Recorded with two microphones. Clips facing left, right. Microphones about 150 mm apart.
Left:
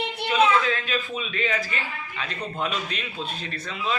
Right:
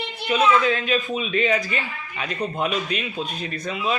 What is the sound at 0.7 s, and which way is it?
A man's voice, 20° right (ahead or behind).